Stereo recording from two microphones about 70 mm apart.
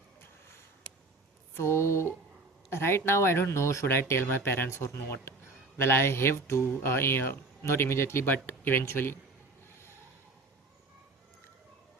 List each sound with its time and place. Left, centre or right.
1.5 s speech: left
4.1 s speech: left